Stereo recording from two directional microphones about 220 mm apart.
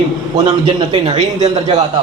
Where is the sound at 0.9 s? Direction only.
25° right (ahead or behind).